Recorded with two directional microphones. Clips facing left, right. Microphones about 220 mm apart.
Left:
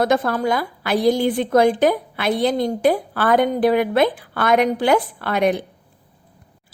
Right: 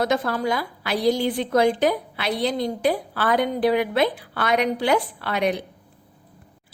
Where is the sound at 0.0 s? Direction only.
50° left (ahead or behind).